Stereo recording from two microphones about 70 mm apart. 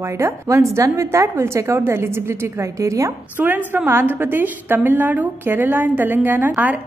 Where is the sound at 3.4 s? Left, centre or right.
Right.